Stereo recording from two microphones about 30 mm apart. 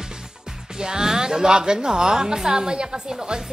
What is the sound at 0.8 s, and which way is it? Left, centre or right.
A woman's voice, right.